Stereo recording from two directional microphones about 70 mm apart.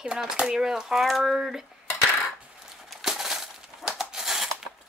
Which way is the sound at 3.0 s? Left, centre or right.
Centre.